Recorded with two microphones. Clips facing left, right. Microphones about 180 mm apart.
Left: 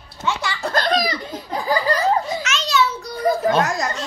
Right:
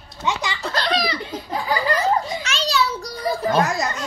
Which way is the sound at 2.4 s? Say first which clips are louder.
Left 2 dB; 35° right (ahead or behind).